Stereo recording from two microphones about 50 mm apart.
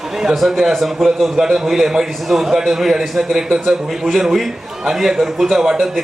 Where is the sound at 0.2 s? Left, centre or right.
Centre.